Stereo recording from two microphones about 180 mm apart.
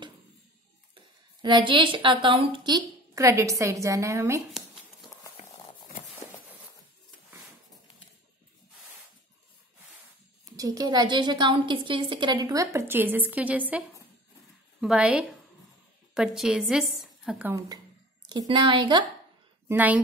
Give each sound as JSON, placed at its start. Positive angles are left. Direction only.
{"t": 0.9, "sound": "a sound", "side_deg": -25}
{"t": 2.2, "sound": "a woman's voice", "side_deg": -30}
{"t": 10.5, "sound": "a woman's voice", "side_deg": -20}
{"t": 18.3, "sound": "a woman's voice", "side_deg": -25}
{"t": 19.7, "sound": "a woman's voice", "side_deg": -10}